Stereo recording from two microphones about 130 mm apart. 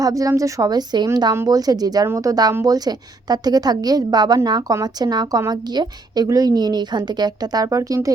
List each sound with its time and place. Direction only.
0.0 s a woman's voice: 25° right (ahead or behind)